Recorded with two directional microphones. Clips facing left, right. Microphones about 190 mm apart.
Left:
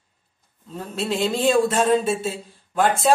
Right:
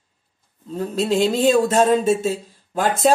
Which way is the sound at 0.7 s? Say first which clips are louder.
Right 6 dB; 40° right (ahead or behind).